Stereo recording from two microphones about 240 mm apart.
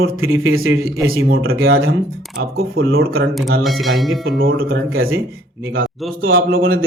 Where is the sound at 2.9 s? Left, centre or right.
Right.